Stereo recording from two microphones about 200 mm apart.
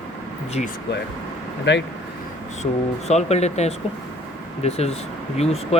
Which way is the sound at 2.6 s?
35° left (ahead or behind).